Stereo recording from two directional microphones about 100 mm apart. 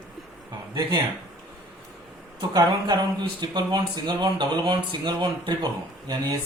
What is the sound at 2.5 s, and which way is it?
Speech, 45° right (ahead or behind).